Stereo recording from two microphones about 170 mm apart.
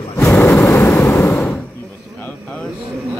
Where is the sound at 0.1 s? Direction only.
15° left (ahead or behind).